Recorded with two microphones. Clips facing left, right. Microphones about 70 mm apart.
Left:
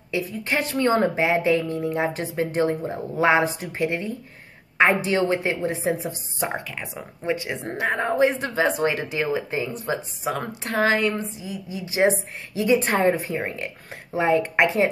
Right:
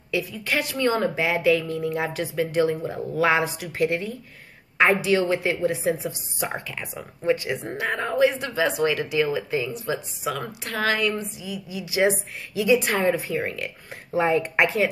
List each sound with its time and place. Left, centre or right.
0.1 s speech: left